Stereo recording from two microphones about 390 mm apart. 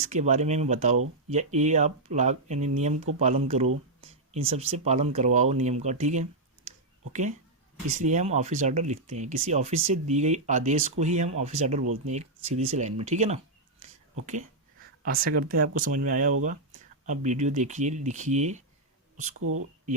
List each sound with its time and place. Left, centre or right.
0.1 s speech: centre
15.0 s speech: right
19.4 s speech: right